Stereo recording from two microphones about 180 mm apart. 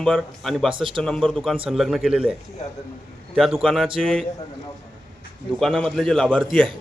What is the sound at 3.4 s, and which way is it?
Speech, centre (ahead or behind).